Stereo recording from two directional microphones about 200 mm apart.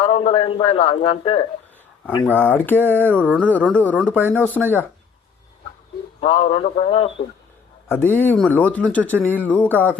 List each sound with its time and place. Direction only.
0.0 s a man's voice: 30° left (ahead or behind)
2.2 s speech: 10° left (ahead or behind)
6.1 s a man's voice: 30° left (ahead or behind)
7.9 s speech: 10° left (ahead or behind)